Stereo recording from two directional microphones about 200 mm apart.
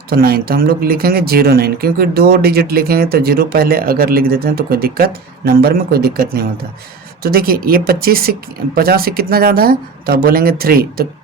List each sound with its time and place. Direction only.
0.1 s speech: 50° right (ahead or behind)